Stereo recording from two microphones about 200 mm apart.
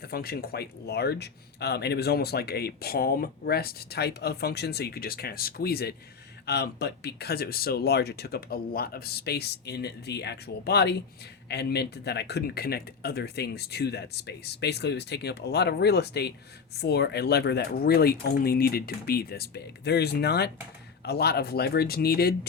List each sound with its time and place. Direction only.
0.0 s speech: 50° left (ahead or behind)